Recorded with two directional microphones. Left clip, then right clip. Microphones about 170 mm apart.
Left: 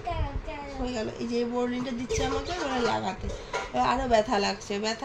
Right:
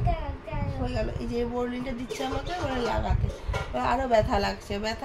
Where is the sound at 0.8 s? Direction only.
25° left (ahead or behind).